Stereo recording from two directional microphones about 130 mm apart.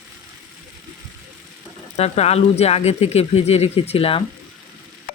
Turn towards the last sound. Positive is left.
turn(degrees=45)  # may be behind; listen again after turning